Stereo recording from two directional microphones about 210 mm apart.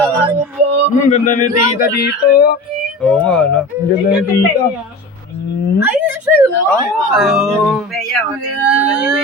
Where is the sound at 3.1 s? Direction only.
5° left (ahead or behind).